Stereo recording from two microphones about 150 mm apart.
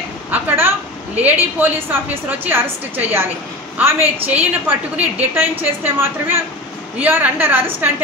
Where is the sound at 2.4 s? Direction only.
15° right (ahead or behind).